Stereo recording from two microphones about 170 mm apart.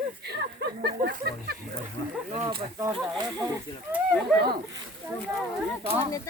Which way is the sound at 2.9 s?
25° right (ahead or behind).